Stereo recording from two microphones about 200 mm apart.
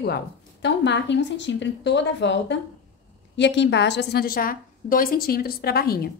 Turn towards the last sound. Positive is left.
turn(degrees=50)  # may be behind; listen again after turning